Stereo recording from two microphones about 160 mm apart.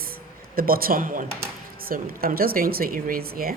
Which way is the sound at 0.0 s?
65° right (ahead or behind).